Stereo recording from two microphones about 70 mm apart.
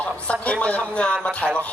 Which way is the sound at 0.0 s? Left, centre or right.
Centre.